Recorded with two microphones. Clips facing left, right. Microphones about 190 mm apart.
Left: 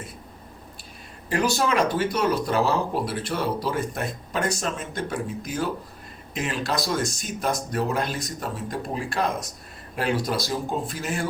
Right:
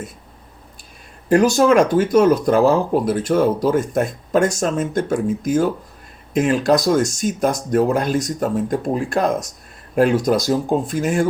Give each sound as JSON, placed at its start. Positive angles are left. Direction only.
{"t": 1.3, "sound": "speech", "side_deg": -45}